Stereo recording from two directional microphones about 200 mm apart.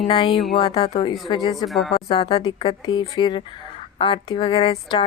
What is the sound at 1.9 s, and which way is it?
Speech, 25° left (ahead or behind).